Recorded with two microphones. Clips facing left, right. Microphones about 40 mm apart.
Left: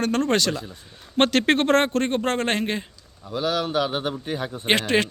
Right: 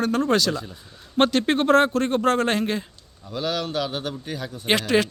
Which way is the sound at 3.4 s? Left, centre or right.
Centre.